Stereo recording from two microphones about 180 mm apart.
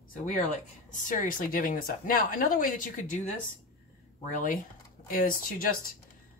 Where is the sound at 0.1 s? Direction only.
45° left (ahead or behind).